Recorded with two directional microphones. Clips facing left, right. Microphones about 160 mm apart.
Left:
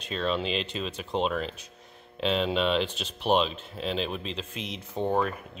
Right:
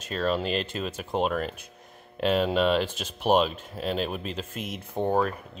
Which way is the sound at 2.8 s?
45° right (ahead or behind).